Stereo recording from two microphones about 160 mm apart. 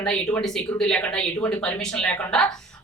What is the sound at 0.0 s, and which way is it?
Speech, 5° left (ahead or behind).